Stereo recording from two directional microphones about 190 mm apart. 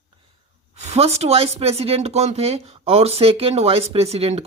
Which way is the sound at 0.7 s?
35° right (ahead or behind).